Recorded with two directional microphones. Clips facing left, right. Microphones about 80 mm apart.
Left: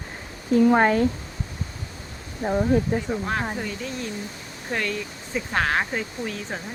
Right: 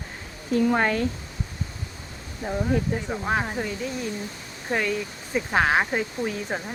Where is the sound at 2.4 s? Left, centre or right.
Left.